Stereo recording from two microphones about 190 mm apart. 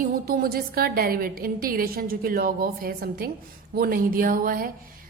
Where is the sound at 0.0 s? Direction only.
50° right (ahead or behind).